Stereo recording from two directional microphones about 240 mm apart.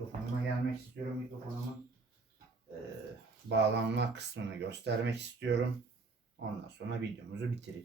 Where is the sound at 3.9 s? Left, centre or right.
Right.